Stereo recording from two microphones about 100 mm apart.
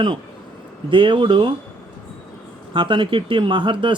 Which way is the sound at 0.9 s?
55° right (ahead or behind).